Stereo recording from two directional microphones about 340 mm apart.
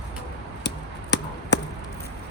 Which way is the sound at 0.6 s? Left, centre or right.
Left.